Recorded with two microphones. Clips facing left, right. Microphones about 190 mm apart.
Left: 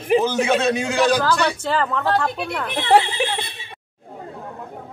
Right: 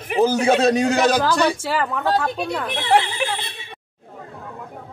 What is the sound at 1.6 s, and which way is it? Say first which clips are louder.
Speech: left 1 dB; 10° right (ahead or behind).